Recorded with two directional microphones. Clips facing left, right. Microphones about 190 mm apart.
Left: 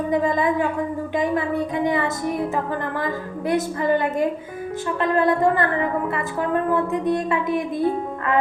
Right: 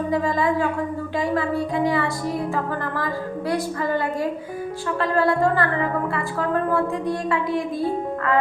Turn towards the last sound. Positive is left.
turn(degrees=20)  # may be behind; listen again after turning